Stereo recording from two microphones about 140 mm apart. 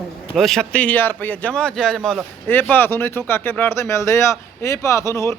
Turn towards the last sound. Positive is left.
turn(degrees=20)  # may be behind; listen again after turning